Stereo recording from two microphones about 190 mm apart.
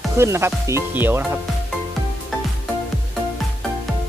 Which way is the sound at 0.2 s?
15° right (ahead or behind).